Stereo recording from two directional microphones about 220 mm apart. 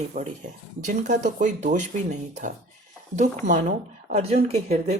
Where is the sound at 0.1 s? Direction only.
30° right (ahead or behind).